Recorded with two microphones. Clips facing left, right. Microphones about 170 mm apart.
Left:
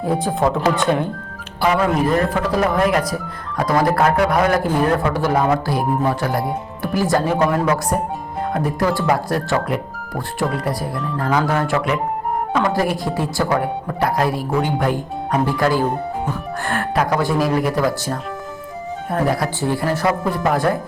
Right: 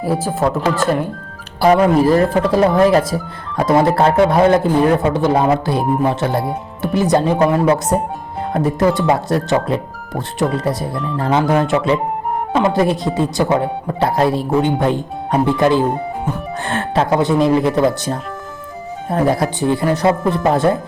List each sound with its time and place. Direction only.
0.0 s speech: 5° right (ahead or behind)
1.6 s speech: 35° right (ahead or behind)